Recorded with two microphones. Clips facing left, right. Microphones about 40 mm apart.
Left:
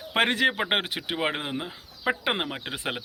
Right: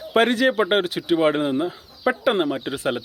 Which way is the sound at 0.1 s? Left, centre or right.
Left.